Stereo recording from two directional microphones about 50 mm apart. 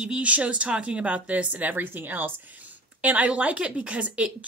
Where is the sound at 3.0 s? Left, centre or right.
Right.